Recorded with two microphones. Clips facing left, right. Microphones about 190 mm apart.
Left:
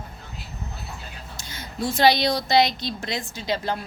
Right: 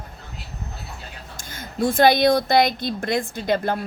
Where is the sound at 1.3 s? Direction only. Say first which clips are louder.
Right 4 dB; 50° right (ahead or behind).